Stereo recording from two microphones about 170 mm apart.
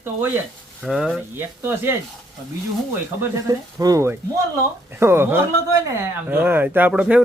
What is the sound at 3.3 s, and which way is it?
Speech, 20° right (ahead or behind).